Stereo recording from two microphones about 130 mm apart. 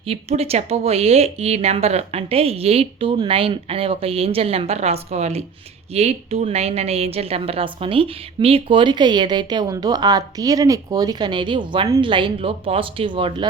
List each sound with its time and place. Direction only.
0.0 s a woman's voice: 50° right (ahead or behind)